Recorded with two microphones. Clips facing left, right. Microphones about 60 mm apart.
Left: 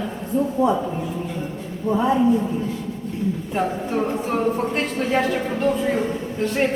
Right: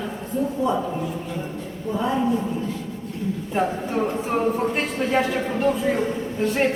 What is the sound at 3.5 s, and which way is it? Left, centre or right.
A woman's voice, centre.